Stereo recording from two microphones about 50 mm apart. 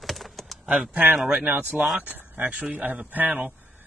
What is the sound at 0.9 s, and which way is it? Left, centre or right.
A man's voice, right.